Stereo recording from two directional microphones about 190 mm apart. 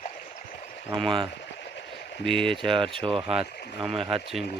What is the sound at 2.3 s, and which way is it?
Speech, 5° left (ahead or behind).